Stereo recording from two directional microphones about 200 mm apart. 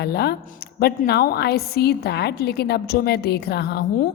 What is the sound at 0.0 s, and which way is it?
A woman's voice, 55° left (ahead or behind).